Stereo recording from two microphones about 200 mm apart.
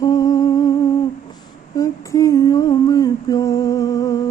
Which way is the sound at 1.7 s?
15° left (ahead or behind).